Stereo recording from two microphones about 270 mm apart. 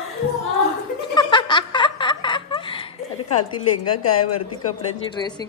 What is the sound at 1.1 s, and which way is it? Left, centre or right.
Giggle, centre.